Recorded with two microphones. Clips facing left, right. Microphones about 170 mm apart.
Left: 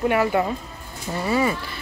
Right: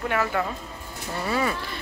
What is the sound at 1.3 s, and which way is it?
Speech, 5° left (ahead or behind).